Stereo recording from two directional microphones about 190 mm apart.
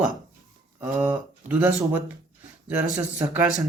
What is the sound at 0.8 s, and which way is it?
Speech, 10° right (ahead or behind).